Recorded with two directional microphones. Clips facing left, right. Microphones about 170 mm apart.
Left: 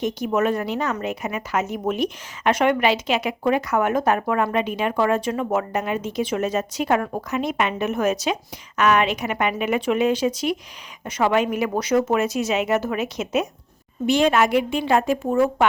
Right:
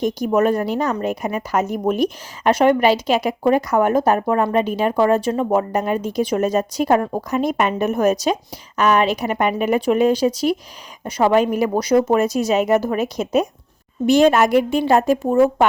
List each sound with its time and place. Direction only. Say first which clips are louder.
0.0 s a woman's voice: right 4 dB; 35° right (ahead or behind)